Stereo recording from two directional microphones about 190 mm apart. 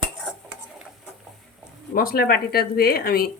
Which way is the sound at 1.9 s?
50° left (ahead or behind).